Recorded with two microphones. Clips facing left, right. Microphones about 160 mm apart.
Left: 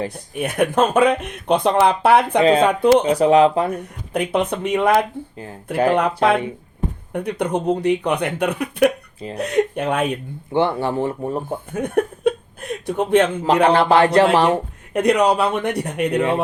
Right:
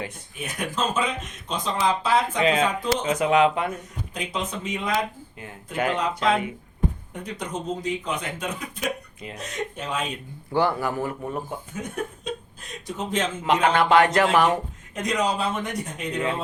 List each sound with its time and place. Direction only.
0.3 s speech: 60° left (ahead or behind)
2.4 s speech: 35° left (ahead or behind)
3.7 s speech: 60° left (ahead or behind)
5.7 s speech: 35° left (ahead or behind)
6.0 s speech: 60° left (ahead or behind)
10.5 s speech: 25° left (ahead or behind)
11.7 s a sound: 60° left (ahead or behind)
13.7 s speech: 30° left (ahead or behind)
14.9 s speech: 65° left (ahead or behind)